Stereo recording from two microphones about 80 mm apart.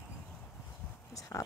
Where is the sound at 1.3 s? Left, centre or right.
Left.